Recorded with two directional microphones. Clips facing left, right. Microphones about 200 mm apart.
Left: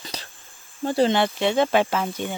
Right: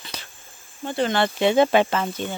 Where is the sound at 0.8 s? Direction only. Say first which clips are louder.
Left 4 dB; 40° left (ahead or behind).